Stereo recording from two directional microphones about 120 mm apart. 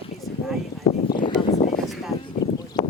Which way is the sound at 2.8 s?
35° left (ahead or behind).